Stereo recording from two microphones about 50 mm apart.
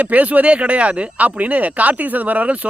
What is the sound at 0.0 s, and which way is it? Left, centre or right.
Speech, right.